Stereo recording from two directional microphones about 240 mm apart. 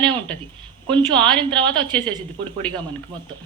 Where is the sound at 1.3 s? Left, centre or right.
Centre.